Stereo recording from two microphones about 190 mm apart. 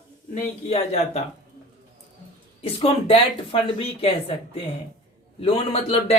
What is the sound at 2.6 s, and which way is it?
Speech, 30° left (ahead or behind).